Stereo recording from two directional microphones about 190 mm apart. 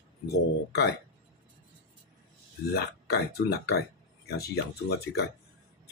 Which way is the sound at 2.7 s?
55° left (ahead or behind).